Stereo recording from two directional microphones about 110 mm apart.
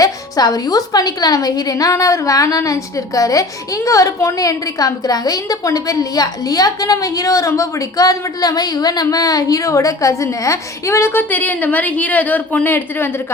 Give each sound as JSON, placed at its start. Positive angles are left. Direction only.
{"t": 0.0, "sound": "a woman's voice", "side_deg": 35}